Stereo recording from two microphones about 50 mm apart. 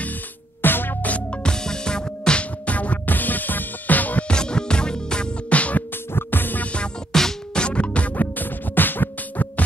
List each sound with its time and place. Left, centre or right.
0.6 s music: left
1.0 s music: left
1.4 s music: centre; by 4.3 s left
4.3 s music: centre
6.1 s music: left
7.1 s music: centre
7.6 s music: left
8.2 s music: left